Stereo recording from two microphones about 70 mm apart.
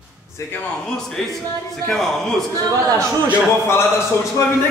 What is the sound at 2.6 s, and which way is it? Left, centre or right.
Speech, right.